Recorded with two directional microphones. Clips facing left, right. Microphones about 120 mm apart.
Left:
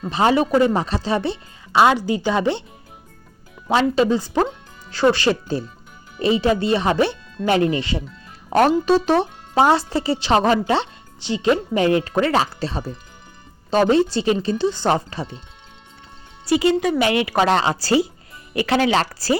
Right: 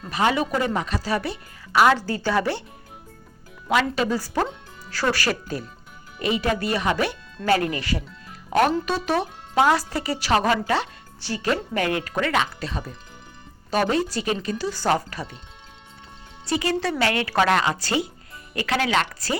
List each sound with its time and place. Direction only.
0.1 s speech: 30° left (ahead or behind)
3.7 s speech: 25° left (ahead or behind)
8.4 s speech: 35° left (ahead or behind)
16.6 s speech: 20° left (ahead or behind)